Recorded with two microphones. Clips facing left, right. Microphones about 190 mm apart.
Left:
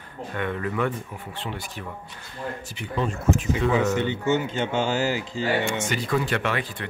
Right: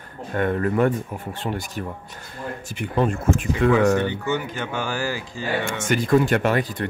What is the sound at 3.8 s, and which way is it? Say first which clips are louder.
Speech: right 4 dB; 20° left (ahead or behind).